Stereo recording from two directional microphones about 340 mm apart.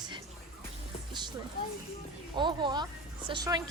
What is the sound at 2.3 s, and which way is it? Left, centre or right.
Speech, centre.